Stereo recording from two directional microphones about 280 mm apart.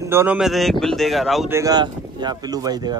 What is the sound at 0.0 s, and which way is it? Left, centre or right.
Speech, centre.